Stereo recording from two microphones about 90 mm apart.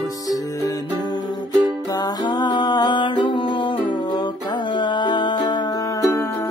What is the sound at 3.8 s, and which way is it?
Music, 60° left (ahead or behind).